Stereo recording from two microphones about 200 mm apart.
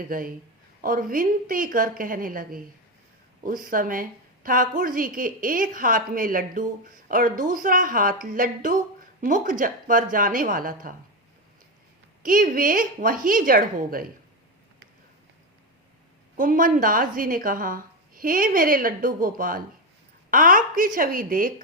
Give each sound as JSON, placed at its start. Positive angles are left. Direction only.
{"t": 0.1, "sound": "a woman's voice", "side_deg": -45}
{"t": 12.2, "sound": "a woman's voice", "side_deg": -45}
{"t": 16.4, "sound": "a woman's voice", "side_deg": -40}